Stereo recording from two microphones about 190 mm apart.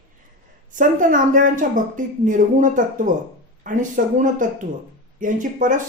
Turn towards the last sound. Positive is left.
turn(degrees=-40)  # may be behind; listen again after turning